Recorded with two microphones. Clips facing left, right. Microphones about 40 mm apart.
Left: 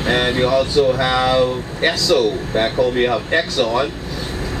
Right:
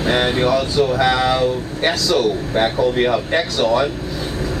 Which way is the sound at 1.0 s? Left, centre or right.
Centre.